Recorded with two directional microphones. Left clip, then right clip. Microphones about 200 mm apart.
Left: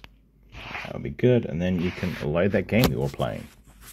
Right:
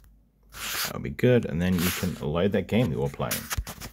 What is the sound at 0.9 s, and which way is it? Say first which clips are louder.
Speech: left 1 dB; 10° right (ahead or behind).